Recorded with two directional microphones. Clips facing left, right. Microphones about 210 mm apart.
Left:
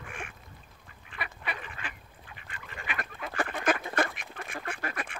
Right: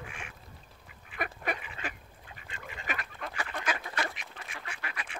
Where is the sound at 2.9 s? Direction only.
40° right (ahead or behind).